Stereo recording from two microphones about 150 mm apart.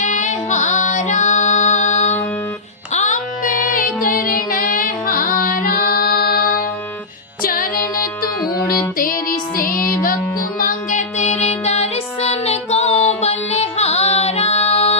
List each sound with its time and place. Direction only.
0.0 s female singing: 55° left (ahead or behind)
2.9 s child singing: 55° left (ahead or behind); by 6.4 s 90° left
7.4 s music: 70° left (ahead or behind)
10.6 s music: 60° left (ahead or behind); by 14.9 s 45° left (ahead or behind)